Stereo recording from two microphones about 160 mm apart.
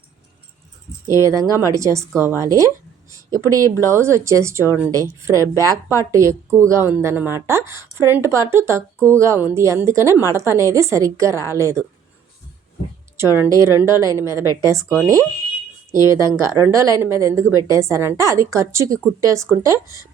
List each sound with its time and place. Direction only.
1.0 s a woman's voice: 20° right (ahead or behind)
13.1 s speech: 15° right (ahead or behind)